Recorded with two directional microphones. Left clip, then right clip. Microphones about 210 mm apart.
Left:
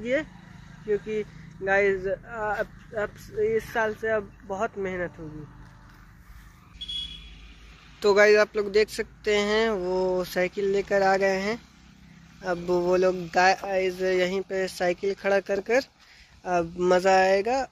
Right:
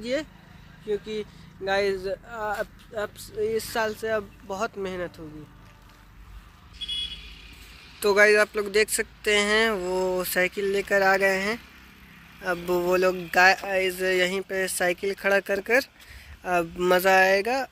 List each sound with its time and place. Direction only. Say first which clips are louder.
0.0 s speech: left 2 dB; 5° right (ahead or behind)
3.3 s speech: left 2 dB; 20° right (ahead or behind)
8.0 s speech: even; centre (ahead or behind)